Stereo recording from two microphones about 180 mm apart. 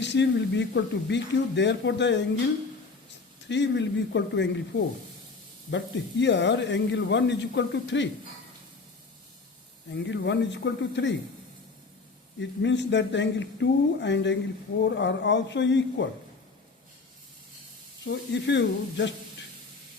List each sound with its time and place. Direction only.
0.0 s a man's voice: 75° left (ahead or behind)
3.5 s a man's voice: 80° left
9.9 s a man's voice: 80° left
12.4 s a man's voice: 80° left
18.0 s speech: 75° left (ahead or behind)